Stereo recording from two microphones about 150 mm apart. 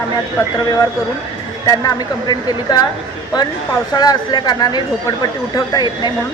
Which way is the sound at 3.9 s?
25° left (ahead or behind).